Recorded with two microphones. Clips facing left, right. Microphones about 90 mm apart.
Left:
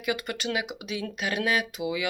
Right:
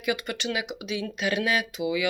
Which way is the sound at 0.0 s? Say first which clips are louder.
Right 1 dB; 40° left (ahead or behind).